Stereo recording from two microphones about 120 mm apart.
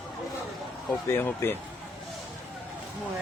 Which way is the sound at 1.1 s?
20° left (ahead or behind).